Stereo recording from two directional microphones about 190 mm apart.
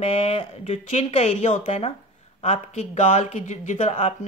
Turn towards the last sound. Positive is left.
turn(degrees=35)  # may be behind; listen again after turning